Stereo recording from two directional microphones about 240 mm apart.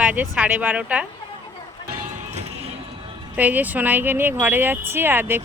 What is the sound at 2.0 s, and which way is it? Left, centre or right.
Music, right.